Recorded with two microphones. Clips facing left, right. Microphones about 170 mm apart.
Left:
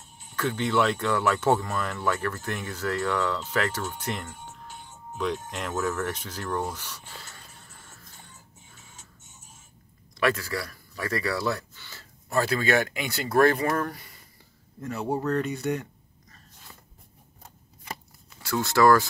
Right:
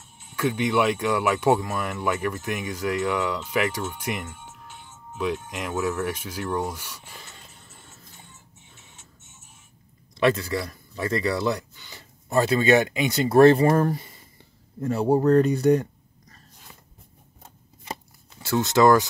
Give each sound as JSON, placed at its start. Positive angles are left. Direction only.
{"t": 0.0, "sound": "music", "side_deg": 40}
{"t": 0.4, "sound": "speech", "side_deg": -15}
{"t": 4.3, "sound": "music", "side_deg": 40}
{"t": 5.1, "sound": "speech", "side_deg": -5}
{"t": 10.1, "sound": "speech", "side_deg": -25}
{"t": 18.4, "sound": "speech", "side_deg": -20}